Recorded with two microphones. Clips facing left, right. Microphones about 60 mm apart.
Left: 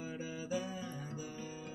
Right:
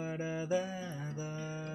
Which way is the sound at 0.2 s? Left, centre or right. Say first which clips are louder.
Right 6 dB; right.